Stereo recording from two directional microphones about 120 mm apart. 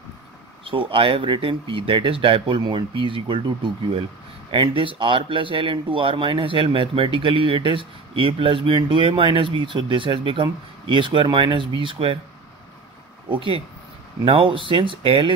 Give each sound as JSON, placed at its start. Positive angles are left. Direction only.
{"t": 0.7, "sound": "speech", "side_deg": -45}
{"t": 14.2, "sound": "speech", "side_deg": -45}